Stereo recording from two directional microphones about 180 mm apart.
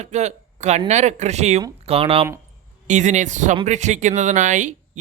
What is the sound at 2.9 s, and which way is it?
A man's voice, 40° right (ahead or behind).